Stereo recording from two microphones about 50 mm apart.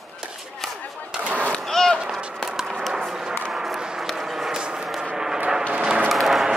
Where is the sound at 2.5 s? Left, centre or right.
Centre.